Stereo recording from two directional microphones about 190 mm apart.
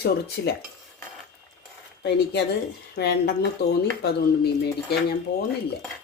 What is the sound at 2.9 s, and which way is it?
Speech, 55° left (ahead or behind).